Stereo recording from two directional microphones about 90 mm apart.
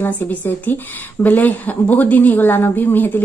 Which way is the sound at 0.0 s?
20° left (ahead or behind).